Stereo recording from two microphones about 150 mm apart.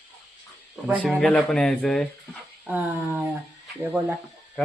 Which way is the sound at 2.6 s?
10° right (ahead or behind).